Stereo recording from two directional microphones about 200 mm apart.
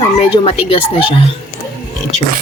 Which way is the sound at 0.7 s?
25° left (ahead or behind).